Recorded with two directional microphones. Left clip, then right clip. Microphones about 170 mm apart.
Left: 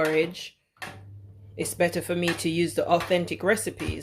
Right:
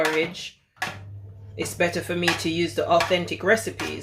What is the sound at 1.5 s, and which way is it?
Speech, 55° left (ahead or behind).